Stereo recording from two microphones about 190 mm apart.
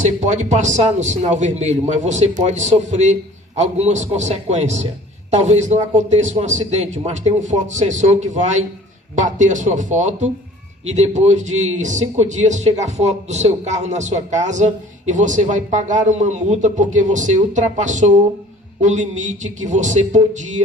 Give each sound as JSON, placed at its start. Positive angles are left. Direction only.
{"t": 0.0, "sound": "speech", "side_deg": -40}